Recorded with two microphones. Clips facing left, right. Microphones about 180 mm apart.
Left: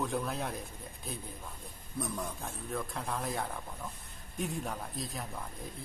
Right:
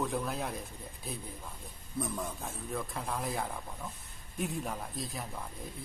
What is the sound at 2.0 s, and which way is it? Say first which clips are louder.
Speech: right 1 dB; centre (ahead or behind).